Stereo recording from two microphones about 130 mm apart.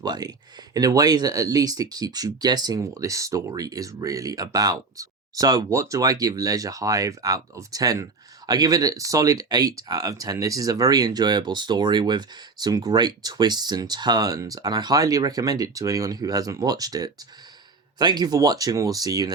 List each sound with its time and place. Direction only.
0.0 s speech: 30° right (ahead or behind)